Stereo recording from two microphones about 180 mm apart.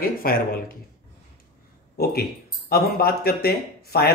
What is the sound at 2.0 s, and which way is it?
Speech, 55° left (ahead or behind).